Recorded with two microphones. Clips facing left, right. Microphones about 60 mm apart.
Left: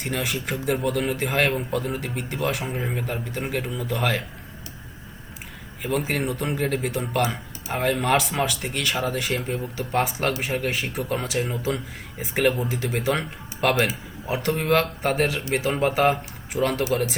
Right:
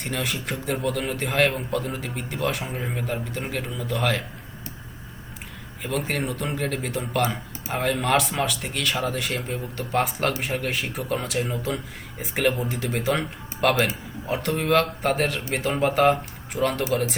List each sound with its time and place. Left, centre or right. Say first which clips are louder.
0.0 s a man's voice: left 1 dB; centre
5.8 s a man's voice: left 2 dB; centre